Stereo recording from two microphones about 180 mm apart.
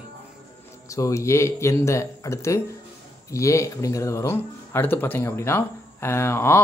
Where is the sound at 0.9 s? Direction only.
15° left (ahead or behind).